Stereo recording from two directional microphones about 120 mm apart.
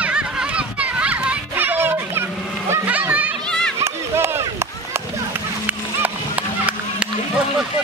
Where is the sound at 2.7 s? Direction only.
15° right (ahead or behind).